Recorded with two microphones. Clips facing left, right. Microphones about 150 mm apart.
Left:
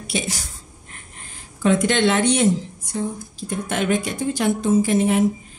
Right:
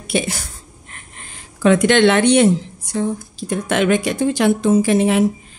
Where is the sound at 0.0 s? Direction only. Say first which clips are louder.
Right 5 dB; 55° right (ahead or behind).